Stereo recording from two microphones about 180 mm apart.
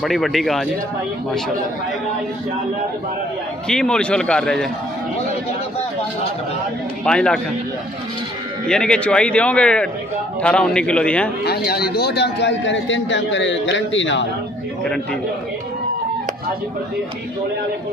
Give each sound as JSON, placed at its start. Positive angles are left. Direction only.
{"t": 0.0, "sound": "a man's voice", "side_deg": 0}
{"t": 3.6, "sound": "a man's voice", "side_deg": 5}
{"t": 7.1, "sound": "a man's voice", "side_deg": 5}
{"t": 8.6, "sound": "a man's voice", "side_deg": 5}
{"t": 11.4, "sound": "a man's voice", "side_deg": 60}